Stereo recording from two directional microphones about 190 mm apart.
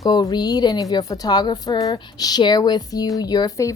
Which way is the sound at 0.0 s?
20° left (ahead or behind).